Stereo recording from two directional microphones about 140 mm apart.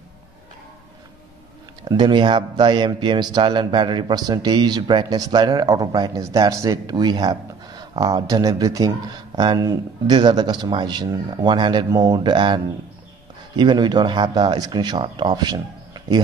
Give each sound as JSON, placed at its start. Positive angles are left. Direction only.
{"t": 1.9, "sound": "a man's voice", "side_deg": -35}
{"t": 13.6, "sound": "a man's voice", "side_deg": -30}